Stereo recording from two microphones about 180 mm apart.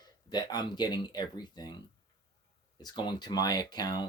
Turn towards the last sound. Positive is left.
turn(degrees=25)  # may be behind; listen again after turning